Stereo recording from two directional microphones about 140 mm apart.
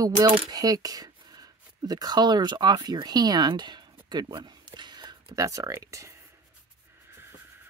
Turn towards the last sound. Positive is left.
turn(degrees=-20)  # may be behind; listen again after turning